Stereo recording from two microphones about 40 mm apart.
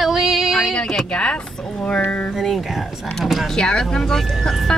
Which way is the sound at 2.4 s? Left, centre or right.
Centre.